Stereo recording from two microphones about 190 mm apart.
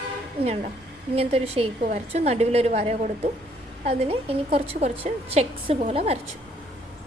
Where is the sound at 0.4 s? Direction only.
30° right (ahead or behind).